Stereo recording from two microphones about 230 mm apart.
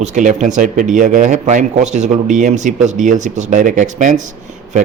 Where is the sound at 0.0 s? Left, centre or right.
Right.